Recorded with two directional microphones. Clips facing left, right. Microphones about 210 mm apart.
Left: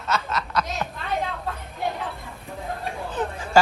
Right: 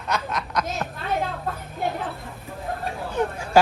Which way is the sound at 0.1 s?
15° right (ahead or behind).